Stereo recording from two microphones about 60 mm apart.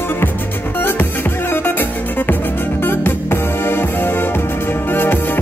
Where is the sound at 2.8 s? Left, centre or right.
Left.